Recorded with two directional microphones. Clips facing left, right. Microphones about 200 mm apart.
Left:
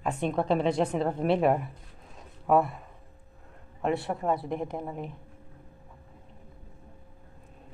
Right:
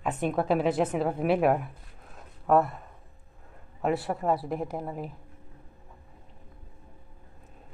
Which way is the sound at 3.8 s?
Centre (ahead or behind).